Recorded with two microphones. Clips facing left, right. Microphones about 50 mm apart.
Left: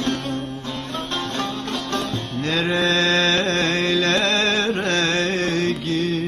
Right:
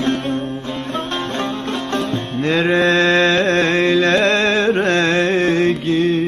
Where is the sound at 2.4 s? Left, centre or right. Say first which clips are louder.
Right 6 dB; right.